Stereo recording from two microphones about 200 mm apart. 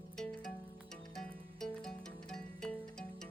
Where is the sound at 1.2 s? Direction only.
5° left (ahead or behind).